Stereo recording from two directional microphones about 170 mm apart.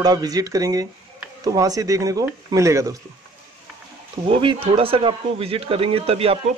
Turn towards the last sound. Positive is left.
turn(degrees=-35)  # may be behind; listen again after turning